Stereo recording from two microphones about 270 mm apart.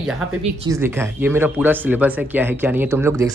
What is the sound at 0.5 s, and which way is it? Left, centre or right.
Speech, centre.